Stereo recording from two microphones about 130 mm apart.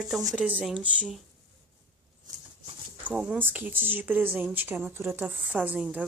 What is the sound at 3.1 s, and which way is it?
Speech, 10° right (ahead or behind).